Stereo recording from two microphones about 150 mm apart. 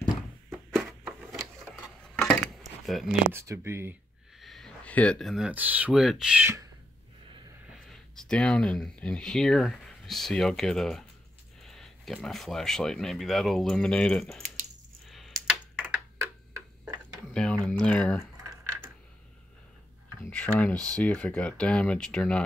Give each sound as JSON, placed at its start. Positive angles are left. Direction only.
{"t": 0.7, "sound": "a sound", "side_deg": 0}
{"t": 2.9, "sound": "speech", "side_deg": 0}
{"t": 3.3, "sound": "speech", "side_deg": -15}
{"t": 4.4, "sound": "speech", "side_deg": 0}
{"t": 7.7, "sound": "speech", "side_deg": 5}
{"t": 15.0, "sound": "coin", "side_deg": 0}
{"t": 15.3, "sound": "a sound", "side_deg": -20}
{"t": 17.3, "sound": "speech", "side_deg": 5}
{"t": 20.2, "sound": "speech", "side_deg": 10}